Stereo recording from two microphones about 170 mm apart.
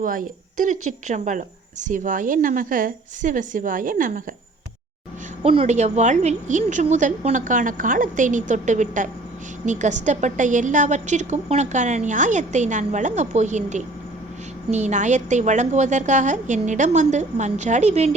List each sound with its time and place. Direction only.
0.0 s speech: 50° right (ahead or behind)
5.4 s speech: 35° right (ahead or behind)